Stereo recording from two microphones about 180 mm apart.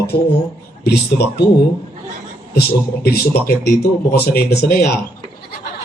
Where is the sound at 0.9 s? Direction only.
65° left (ahead or behind).